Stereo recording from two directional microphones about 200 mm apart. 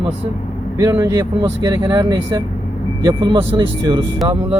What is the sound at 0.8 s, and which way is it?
Speech, 15° right (ahead or behind).